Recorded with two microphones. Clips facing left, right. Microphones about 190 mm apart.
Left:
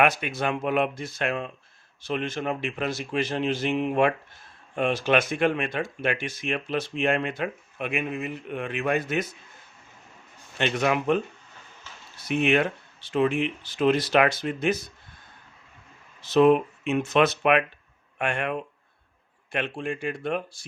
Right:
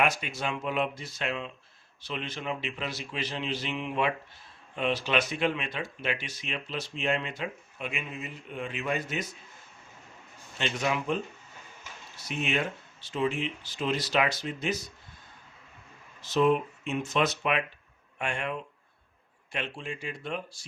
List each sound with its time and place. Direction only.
0.0 s speech: 60° left (ahead or behind)
10.6 s speech: 60° left (ahead or behind)
16.2 s speech: 65° left (ahead or behind)